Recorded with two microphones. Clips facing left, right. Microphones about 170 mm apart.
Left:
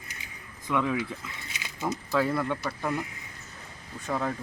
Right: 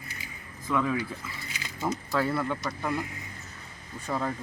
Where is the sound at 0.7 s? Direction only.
15° left (ahead or behind).